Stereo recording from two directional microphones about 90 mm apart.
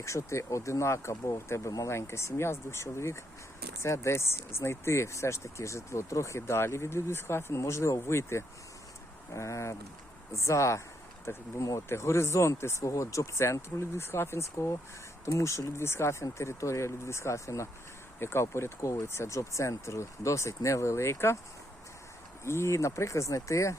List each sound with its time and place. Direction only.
0.0 s speech: 35° left (ahead or behind)
22.4 s speech: 30° left (ahead or behind)